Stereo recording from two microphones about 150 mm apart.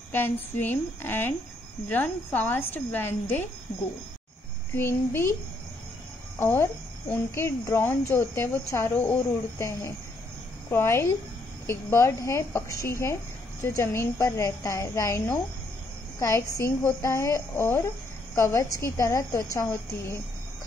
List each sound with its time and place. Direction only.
0.1 s a woman's voice: 15° left (ahead or behind)
4.7 s a woman's voice: 15° left (ahead or behind)
6.4 s a woman's voice: 15° left (ahead or behind)